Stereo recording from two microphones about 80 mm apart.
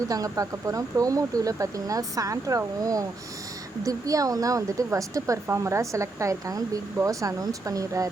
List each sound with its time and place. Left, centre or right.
0.1 s speech: right